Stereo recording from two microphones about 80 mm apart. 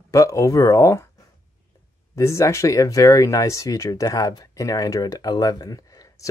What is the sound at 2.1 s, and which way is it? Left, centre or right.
Speech, left.